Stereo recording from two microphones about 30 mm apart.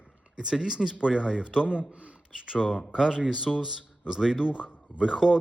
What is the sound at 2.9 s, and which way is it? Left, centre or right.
Speech, centre.